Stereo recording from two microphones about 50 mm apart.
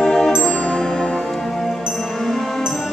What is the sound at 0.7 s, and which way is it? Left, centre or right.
Music, centre.